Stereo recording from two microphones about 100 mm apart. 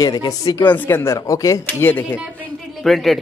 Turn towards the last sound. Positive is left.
turn(degrees=0)  # may be behind; listen again after turning